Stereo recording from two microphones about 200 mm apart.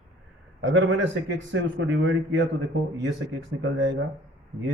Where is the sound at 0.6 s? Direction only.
70° right (ahead or behind).